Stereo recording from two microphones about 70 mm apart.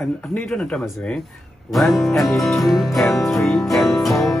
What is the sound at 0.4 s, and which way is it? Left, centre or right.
Speech, centre.